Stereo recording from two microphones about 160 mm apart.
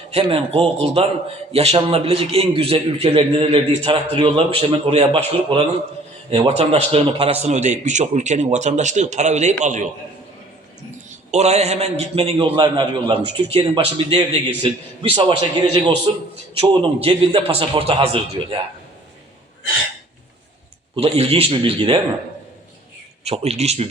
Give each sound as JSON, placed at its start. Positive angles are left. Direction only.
{"t": 0.1, "sound": "a man's voice", "side_deg": -40}
{"t": 11.3, "sound": "a man's voice", "side_deg": -45}
{"t": 20.9, "sound": "a man's voice", "side_deg": -35}
{"t": 23.2, "sound": "a man's voice", "side_deg": -40}